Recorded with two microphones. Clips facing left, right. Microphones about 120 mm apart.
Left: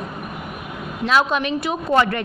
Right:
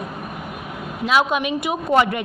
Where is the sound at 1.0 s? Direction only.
10° right (ahead or behind).